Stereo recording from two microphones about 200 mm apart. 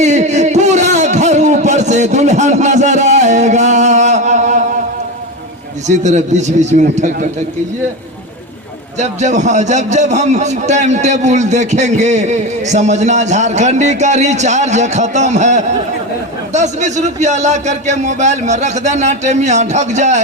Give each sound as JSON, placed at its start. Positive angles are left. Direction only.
{"t": 0.0, "sound": "a sound", "side_deg": -35}
{"t": 6.0, "sound": "a man's voice", "side_deg": -35}
{"t": 9.0, "sound": "a man's voice", "side_deg": -35}